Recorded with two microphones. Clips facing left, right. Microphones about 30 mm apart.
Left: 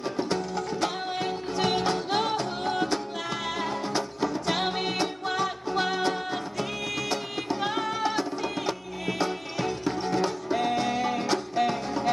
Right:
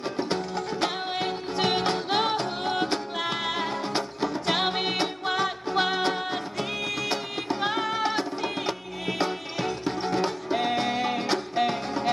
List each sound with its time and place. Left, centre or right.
0.2 s music: right